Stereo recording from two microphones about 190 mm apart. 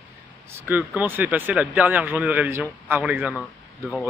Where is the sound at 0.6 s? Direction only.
10° right (ahead or behind).